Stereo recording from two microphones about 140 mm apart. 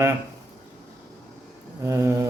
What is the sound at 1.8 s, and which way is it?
Speech, 20° right (ahead or behind).